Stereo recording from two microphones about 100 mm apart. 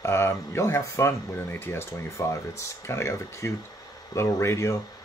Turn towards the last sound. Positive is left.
turn(degrees=30)  # may be behind; listen again after turning